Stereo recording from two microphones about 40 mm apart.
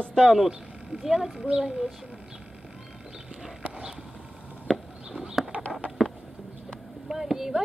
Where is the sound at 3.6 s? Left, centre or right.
Right.